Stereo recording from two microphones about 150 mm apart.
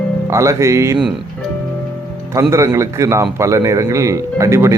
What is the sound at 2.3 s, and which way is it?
Speech, 20° right (ahead or behind).